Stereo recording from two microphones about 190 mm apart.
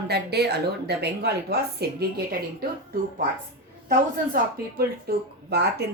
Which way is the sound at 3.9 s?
50° right (ahead or behind).